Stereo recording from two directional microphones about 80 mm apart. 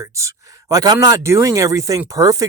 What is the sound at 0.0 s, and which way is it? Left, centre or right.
Speech, right.